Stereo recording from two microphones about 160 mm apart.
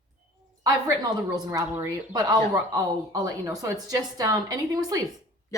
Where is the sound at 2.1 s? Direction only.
25° right (ahead or behind).